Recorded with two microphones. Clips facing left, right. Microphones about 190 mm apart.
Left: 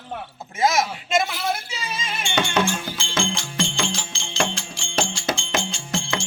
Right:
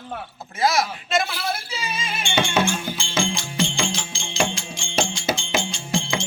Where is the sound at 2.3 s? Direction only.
5° right (ahead or behind).